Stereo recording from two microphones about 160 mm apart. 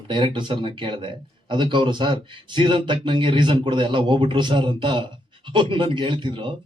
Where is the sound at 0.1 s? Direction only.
30° right (ahead or behind).